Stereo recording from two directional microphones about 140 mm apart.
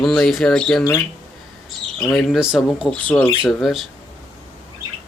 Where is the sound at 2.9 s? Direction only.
10° left (ahead or behind).